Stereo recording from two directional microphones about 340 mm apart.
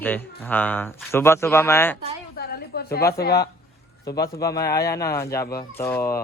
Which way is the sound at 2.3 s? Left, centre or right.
Left.